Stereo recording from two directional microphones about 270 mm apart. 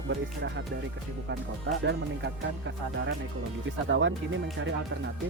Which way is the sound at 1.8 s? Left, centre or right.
Right.